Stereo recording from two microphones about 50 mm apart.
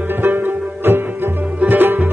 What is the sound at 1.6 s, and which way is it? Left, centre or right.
Music, right.